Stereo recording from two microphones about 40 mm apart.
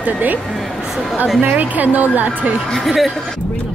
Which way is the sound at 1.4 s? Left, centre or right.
Right.